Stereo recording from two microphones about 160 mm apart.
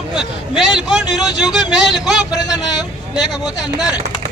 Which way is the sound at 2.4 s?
25° left (ahead or behind).